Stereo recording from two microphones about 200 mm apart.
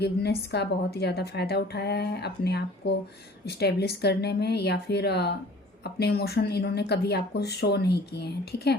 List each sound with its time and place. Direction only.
0.0 s a woman's voice: 55° left (ahead or behind)